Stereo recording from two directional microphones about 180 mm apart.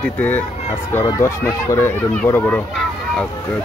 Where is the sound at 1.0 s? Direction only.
20° left (ahead or behind).